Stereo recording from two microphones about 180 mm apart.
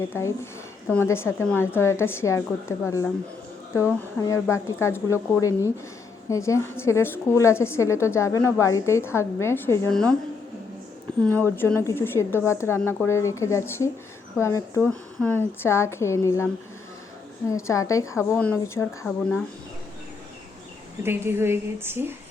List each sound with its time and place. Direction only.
0.1 s a woman's voice: 15° left (ahead or behind)
4.2 s a woman's voice: 15° left (ahead or behind)
11.2 s a woman's voice: 10° left (ahead or behind)
17.5 s a woman's voice: 20° left (ahead or behind)
21.0 s a woman's voice: 15° right (ahead or behind)